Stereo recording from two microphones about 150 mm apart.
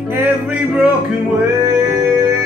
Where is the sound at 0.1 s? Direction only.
10° right (ahead or behind).